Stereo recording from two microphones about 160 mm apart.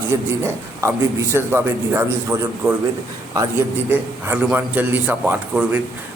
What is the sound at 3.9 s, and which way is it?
A man's voice, 10° right (ahead or behind).